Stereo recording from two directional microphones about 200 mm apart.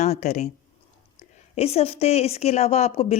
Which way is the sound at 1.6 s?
30° left (ahead or behind).